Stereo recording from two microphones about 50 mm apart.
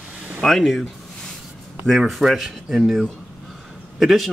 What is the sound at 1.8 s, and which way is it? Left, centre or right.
Speech, centre.